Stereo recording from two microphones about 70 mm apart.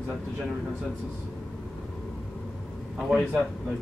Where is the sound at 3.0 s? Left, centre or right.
Centre.